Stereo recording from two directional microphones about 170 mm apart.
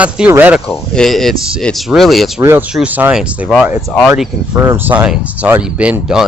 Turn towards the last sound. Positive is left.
turn(degrees=-5)  # may be behind; listen again after turning